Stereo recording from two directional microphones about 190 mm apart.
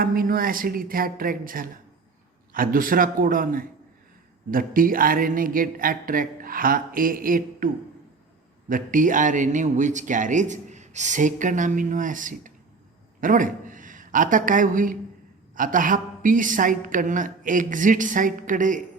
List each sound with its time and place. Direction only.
0.0 s a woman's voice: 50° right (ahead or behind)
8.7 s a woman's voice: 45° right (ahead or behind)